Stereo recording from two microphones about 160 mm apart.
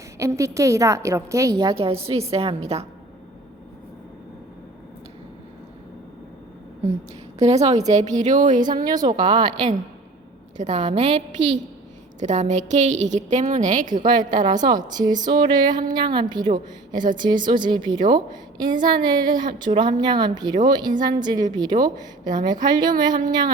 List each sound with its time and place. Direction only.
0.2 s a woman's voice: 20° right (ahead or behind)
1.7 s a woman's voice: 35° right (ahead or behind)
7.3 s a woman's voice: 40° right (ahead or behind)
8.7 s a woman's voice: 25° right (ahead or behind)
10.6 s a woman's voice: 40° right (ahead or behind)
14.1 s a woman's voice: 25° right (ahead or behind)